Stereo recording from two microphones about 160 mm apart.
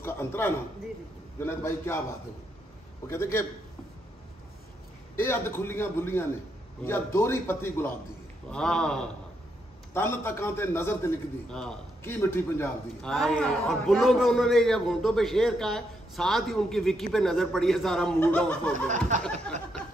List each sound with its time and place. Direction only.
0.0 s a sound: 15° left (ahead or behind)
1.4 s a man's voice: 15° left (ahead or behind)
3.1 s a man's voice: 15° left (ahead or behind)
5.1 s a man's voice: 15° left (ahead or behind)
8.5 s a man's voice: 5° left (ahead or behind)
9.9 s a man's voice: 15° left (ahead or behind)
11.4 s a man's voice: 5° left (ahead or behind)
12.0 s a man's voice: 15° left (ahead or behind)
13.0 s a man's voice: 5° left (ahead or behind)
19.1 s speech: 50° right (ahead or behind)